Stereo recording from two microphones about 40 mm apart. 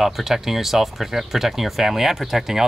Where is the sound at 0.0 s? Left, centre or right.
Centre.